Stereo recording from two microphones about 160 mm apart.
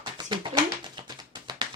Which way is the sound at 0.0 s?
25° right (ahead or behind).